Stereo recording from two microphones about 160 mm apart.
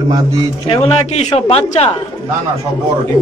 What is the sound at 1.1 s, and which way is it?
Speech, 40° left (ahead or behind).